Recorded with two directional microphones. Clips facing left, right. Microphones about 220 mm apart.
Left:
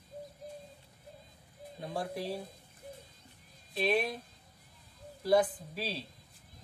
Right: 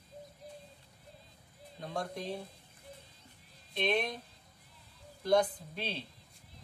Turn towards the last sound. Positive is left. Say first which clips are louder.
# left 1 dB
turn(degrees=5)  # may be behind; listen again after turning